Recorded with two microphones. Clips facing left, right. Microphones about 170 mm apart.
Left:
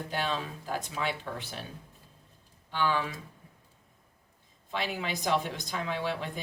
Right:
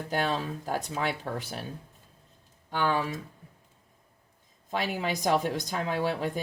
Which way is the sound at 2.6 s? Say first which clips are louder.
Right 2 dB; 40° right (ahead or behind).